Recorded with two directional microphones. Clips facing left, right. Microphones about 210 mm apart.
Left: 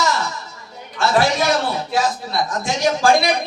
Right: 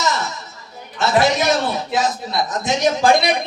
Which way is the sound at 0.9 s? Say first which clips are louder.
Right 1 dB; 20° right (ahead or behind).